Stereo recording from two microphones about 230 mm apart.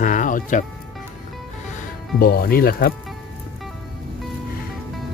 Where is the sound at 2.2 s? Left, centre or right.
Left.